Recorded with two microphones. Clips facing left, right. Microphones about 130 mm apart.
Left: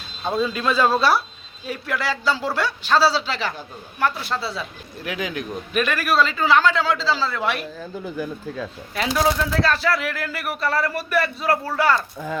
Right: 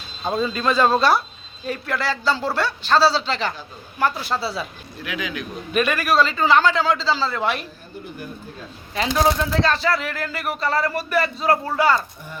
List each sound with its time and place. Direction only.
0.3 s speech: centre (ahead or behind)
5.0 s speech: 40° left (ahead or behind)
5.7 s speech: centre (ahead or behind)
9.2 s speech: 5° left (ahead or behind)